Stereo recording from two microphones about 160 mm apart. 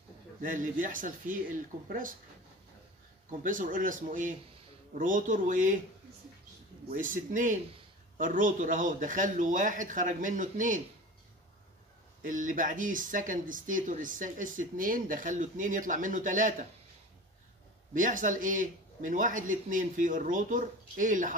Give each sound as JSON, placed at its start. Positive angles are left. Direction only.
{"t": 0.4, "sound": "speech", "side_deg": -55}
{"t": 3.3, "sound": "speech", "side_deg": -55}
{"t": 6.9, "sound": "speech", "side_deg": -55}
{"t": 12.2, "sound": "speech", "side_deg": -55}
{"t": 17.9, "sound": "speech", "side_deg": -55}